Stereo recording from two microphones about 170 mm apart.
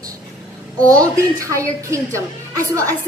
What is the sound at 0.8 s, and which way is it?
A woman's voice, 20° right (ahead or behind).